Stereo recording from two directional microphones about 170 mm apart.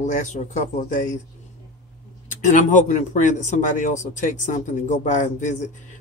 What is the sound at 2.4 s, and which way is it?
Speech, 45° left (ahead or behind).